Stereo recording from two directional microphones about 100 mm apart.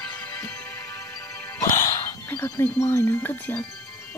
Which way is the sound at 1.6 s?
25° left (ahead or behind).